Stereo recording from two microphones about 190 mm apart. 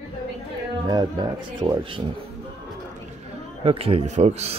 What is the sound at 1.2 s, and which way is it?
Speech, 20° right (ahead or behind).